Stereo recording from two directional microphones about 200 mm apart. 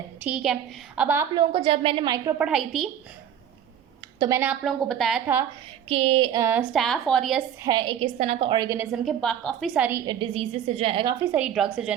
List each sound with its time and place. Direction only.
0.2 s a woman's voice: 5° right (ahead or behind)
2.4 s speech: centre (ahead or behind)
4.2 s a woman's voice: 15° right (ahead or behind)
4.6 s speech: centre (ahead or behind)
5.9 s a woman's voice: 30° right (ahead or behind)
6.5 s speech: 5° right (ahead or behind)
7.6 s a woman's voice: 20° right (ahead or behind)
8.0 s a woman's voice: 30° right (ahead or behind); by 9.0 s 15° right (ahead or behind)
9.0 s speech: 5° left (ahead or behind)
10.1 s a woman's voice: 25° right (ahead or behind); by 11.9 s 5° right (ahead or behind)